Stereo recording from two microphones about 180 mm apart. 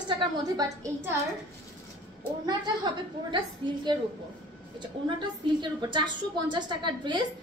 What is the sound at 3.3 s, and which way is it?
Speech, 25° right (ahead or behind).